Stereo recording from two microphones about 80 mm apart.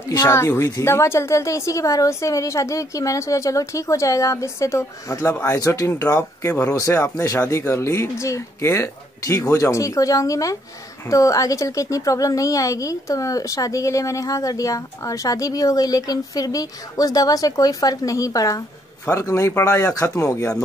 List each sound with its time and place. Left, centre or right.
0.3 s a woman's voice: left